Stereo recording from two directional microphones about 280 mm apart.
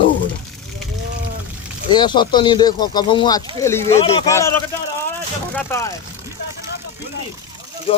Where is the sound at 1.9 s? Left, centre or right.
Centre.